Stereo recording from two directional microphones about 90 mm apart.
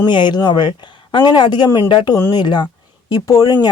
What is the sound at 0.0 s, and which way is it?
Speech, 55° left (ahead or behind).